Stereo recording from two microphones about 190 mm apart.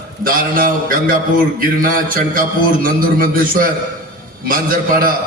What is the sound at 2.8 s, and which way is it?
Speech, 50° right (ahead or behind).